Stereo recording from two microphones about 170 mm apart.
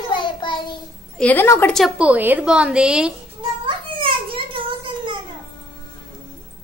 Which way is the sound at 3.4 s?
25° right (ahead or behind).